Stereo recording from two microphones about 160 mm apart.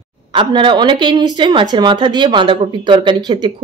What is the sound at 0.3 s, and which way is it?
A woman's voice, 30° right (ahead or behind).